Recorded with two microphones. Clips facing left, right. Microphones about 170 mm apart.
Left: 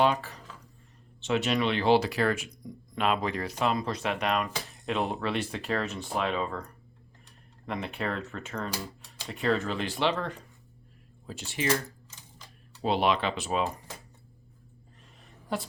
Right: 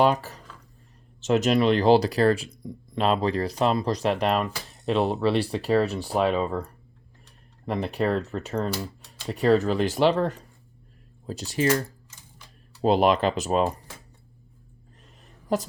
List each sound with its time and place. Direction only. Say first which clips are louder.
0.0 s speech: right 4 dB; 40° right (ahead or behind)
7.7 s speech: right 8 dB; 35° right (ahead or behind)
12.8 s speech: right 6 dB; 40° right (ahead or behind)